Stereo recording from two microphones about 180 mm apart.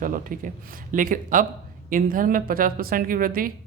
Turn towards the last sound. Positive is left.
turn(degrees=-50)  # may be behind; listen again after turning